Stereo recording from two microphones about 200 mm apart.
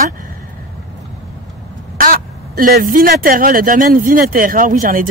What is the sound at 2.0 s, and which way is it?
Speech, 45° right (ahead or behind).